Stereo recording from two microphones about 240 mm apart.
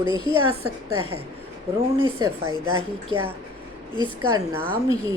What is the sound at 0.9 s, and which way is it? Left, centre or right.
Speech, right.